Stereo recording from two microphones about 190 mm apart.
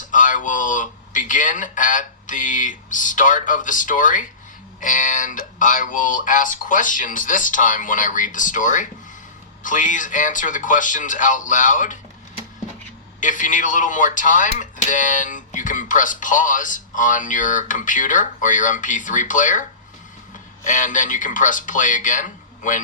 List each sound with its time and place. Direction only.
0.1 s speech: 45° left (ahead or behind)
13.1 s speech: 45° left (ahead or behind)
20.7 s speech: 40° left (ahead or behind)